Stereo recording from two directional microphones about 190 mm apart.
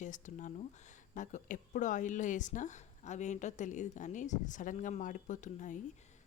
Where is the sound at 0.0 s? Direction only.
40° left (ahead or behind).